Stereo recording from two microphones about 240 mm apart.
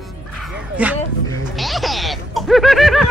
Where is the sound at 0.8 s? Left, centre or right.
Centre.